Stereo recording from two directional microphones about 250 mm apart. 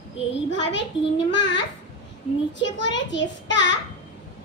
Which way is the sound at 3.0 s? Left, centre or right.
Left.